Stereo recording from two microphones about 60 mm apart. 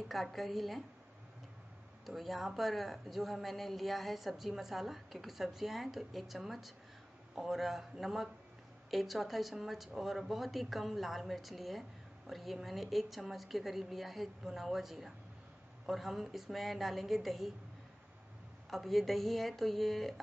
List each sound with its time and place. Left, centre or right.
0.1 s a woman's voice: centre
2.0 s a woman's voice: centre
18.7 s a woman's voice: centre